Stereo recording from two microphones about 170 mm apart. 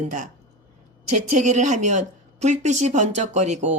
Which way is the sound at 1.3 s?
45° right (ahead or behind).